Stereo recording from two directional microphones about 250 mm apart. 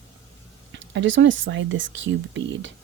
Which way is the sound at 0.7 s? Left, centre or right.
Right.